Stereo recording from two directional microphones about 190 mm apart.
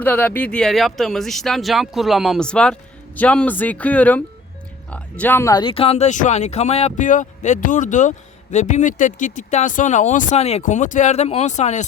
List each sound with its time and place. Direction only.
0.0 s speech: 10° left (ahead or behind); by 11.9 s 35° left (ahead or behind)